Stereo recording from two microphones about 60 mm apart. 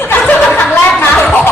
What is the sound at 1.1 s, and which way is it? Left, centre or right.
Speech, centre.